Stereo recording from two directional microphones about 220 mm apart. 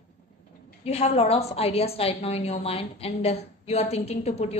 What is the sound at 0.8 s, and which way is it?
A woman's voice, 30° left (ahead or behind).